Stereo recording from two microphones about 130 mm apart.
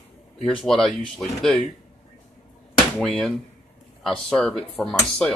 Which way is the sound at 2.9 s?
5° left (ahead or behind).